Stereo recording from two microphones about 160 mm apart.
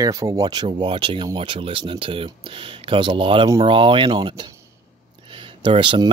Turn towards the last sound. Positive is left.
turn(degrees=-30)  # may be behind; listen again after turning